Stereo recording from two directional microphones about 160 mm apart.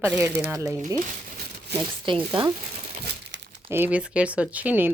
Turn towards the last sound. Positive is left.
turn(degrees=-10)  # may be behind; listen again after turning